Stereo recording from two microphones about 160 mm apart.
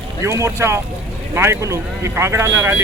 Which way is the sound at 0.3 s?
15° right (ahead or behind).